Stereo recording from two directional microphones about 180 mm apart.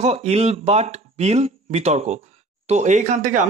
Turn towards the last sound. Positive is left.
turn(degrees=-45)  # may be behind; listen again after turning